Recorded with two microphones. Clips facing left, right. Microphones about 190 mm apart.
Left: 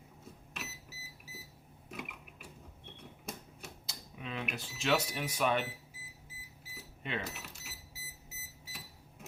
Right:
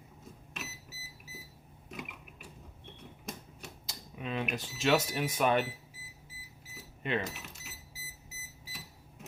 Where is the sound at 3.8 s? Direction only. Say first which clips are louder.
Right 5 dB; 40° right (ahead or behind).